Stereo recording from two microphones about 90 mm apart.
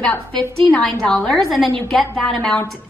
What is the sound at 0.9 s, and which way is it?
A woman's voice, 5° left (ahead or behind).